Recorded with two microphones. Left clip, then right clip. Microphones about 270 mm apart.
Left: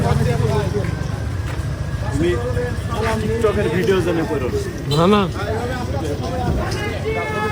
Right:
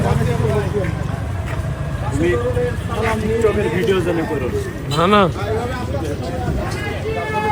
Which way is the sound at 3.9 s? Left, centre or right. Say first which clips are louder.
Even; left.